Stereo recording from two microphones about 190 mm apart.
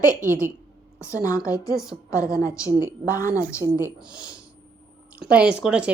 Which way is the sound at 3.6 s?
5° right (ahead or behind).